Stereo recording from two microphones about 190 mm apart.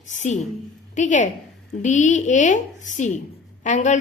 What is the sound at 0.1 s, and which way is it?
A woman's voice, 40° left (ahead or behind).